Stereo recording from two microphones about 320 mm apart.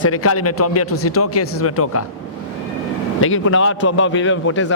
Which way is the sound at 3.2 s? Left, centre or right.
Left.